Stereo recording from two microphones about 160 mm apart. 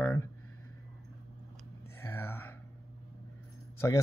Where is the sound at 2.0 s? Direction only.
15° left (ahead or behind).